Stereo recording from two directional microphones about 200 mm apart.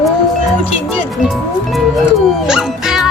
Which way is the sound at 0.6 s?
Centre (ahead or behind).